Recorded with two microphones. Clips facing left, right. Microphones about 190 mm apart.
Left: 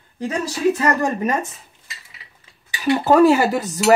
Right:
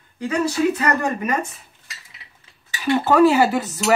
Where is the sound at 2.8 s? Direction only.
40° left (ahead or behind).